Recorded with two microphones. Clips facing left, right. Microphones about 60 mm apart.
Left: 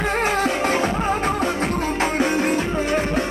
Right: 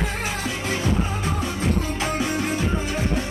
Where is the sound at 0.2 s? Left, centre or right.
Left.